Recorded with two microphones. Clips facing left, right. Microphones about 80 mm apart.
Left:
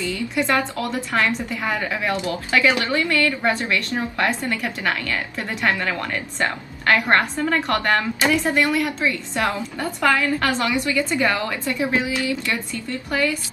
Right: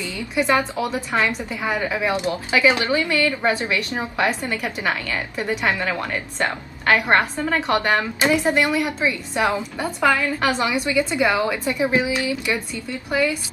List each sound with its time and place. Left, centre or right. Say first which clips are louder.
0.0 s a woman's voice: even; centre